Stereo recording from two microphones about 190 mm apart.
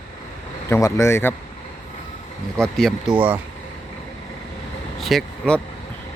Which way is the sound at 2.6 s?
Centre (ahead or behind).